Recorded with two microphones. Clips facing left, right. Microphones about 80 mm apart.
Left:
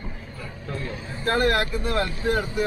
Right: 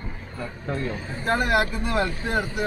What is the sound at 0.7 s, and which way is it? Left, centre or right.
Speech, right.